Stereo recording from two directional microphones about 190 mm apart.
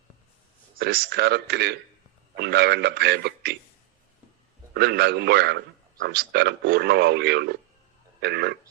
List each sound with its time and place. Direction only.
0.8 s speech: 55° right (ahead or behind)
4.7 s speech: 60° right (ahead or behind)